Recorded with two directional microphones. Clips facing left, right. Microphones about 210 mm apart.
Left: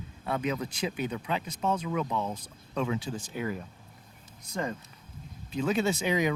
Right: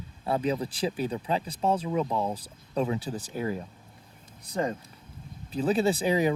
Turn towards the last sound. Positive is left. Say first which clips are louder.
# right 3 dB
turn(degrees=-35)  # may be behind; listen again after turning